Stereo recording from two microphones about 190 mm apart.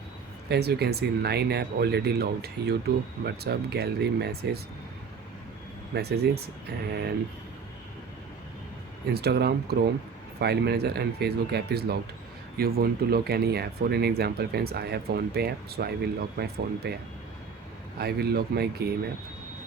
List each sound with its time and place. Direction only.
0.4 s speech: 60° right (ahead or behind)
5.9 s speech: 60° right (ahead or behind)
9.1 s speech: 60° right (ahead or behind)
18.0 s speech: 55° right (ahead or behind)